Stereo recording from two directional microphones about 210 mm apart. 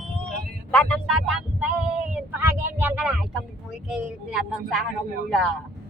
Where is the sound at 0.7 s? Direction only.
5° left (ahead or behind).